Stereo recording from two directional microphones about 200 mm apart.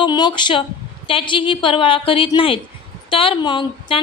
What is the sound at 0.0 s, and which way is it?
A woman's voice, 20° left (ahead or behind).